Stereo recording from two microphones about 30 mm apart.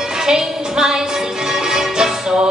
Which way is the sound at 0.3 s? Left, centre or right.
Right.